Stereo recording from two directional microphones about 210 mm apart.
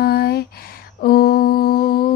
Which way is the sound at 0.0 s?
50° left (ahead or behind).